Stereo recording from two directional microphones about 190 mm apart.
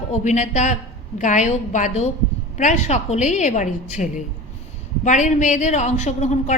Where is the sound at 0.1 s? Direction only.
40° left (ahead or behind).